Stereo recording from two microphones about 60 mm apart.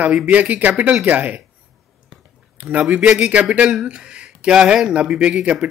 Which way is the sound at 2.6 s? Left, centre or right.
Right.